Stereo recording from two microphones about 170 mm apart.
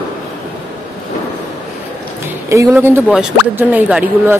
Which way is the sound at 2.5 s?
15° right (ahead or behind).